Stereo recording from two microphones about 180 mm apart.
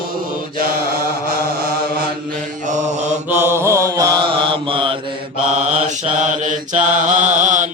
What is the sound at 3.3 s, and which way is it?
Mantra, 15° right (ahead or behind).